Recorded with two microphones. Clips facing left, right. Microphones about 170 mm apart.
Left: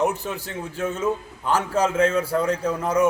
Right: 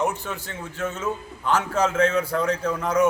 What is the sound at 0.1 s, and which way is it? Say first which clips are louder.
Speech: left 2 dB; 35° left (ahead or behind).